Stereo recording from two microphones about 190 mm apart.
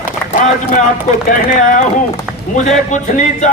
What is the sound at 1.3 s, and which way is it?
Speech, 45° left (ahead or behind).